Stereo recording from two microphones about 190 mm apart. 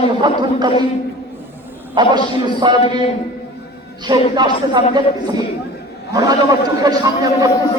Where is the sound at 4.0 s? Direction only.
25° right (ahead or behind).